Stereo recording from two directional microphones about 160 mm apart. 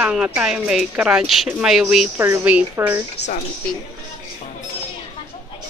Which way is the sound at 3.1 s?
90° left.